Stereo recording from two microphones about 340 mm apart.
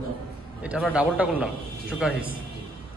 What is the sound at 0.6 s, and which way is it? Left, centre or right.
A man's voice, centre.